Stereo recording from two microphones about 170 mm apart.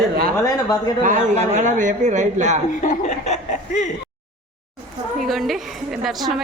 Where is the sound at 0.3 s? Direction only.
20° left (ahead or behind).